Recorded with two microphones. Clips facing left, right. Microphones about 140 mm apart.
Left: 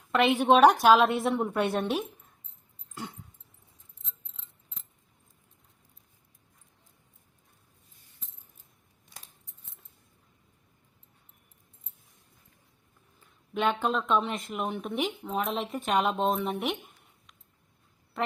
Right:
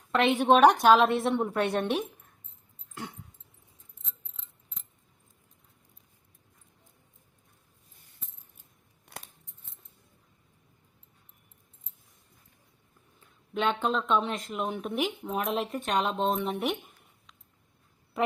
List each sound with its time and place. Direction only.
0.1 s speech: 5° left (ahead or behind)
2.9 s dog: centre (ahead or behind)
9.0 s scissors: 65° right (ahead or behind)
13.1 s speech: 5° left (ahead or behind)